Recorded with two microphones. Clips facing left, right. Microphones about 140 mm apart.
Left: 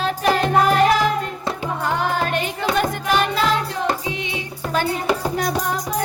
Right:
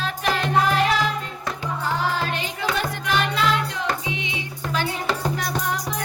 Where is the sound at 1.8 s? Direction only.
60° left (ahead or behind).